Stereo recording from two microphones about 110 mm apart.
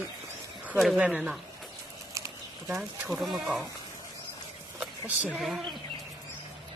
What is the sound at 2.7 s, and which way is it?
Speech, 5° right (ahead or behind).